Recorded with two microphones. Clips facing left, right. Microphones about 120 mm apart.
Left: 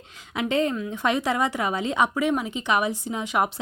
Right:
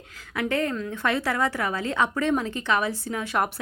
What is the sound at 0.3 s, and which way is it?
A woman's voice, 20° left (ahead or behind).